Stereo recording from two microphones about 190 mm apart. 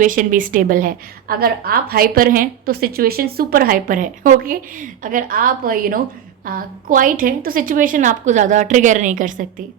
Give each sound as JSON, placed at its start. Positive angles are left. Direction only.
{"t": 0.0, "sound": "a woman's voice", "side_deg": -45}